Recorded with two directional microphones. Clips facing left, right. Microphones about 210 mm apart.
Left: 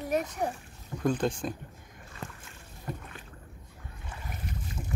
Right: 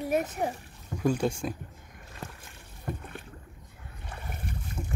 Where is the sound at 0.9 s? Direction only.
10° right (ahead or behind).